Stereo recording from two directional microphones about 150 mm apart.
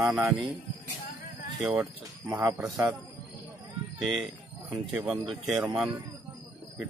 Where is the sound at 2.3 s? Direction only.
5° right (ahead or behind).